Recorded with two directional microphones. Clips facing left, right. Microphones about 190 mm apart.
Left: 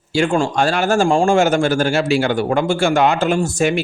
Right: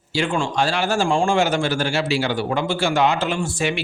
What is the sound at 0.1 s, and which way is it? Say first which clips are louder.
Speech: left 5 dB; 45° left (ahead or behind).